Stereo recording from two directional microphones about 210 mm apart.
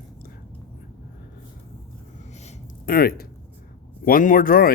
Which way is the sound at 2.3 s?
40° left (ahead or behind).